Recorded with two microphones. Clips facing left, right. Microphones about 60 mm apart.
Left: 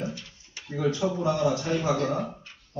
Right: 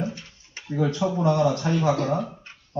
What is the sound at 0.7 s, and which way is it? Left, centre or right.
A man's voice, right.